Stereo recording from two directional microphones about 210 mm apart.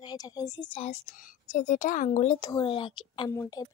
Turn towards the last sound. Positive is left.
turn(degrees=15)  # may be behind; listen again after turning